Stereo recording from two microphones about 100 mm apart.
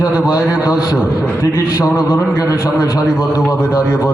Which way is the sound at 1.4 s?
30° left (ahead or behind).